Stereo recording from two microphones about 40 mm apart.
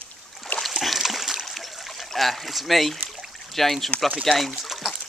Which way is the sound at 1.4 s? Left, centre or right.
Centre.